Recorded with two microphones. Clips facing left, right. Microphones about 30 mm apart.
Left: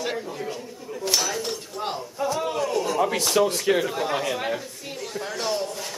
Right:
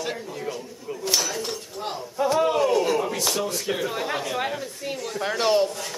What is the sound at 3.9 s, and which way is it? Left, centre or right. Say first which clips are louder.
Speech: left 2 dB; centre.